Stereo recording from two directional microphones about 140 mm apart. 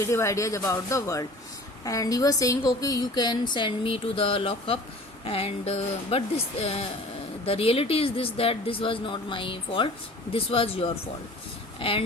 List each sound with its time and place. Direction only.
0.0 s a woman's voice: 20° left (ahead or behind); by 12.0 s 40° left (ahead or behind)